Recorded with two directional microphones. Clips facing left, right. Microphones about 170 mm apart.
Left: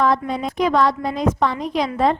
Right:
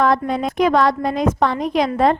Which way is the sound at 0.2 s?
60° right (ahead or behind).